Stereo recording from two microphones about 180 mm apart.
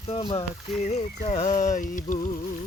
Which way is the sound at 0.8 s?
40° left (ahead or behind).